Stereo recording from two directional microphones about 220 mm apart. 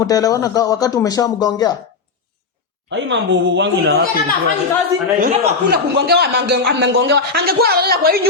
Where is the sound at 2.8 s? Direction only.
55° right (ahead or behind).